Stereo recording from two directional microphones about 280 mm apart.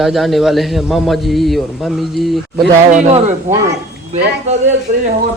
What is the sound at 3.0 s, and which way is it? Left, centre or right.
A man's voice, right.